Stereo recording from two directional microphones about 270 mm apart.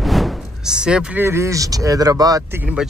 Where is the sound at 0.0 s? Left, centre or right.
Centre.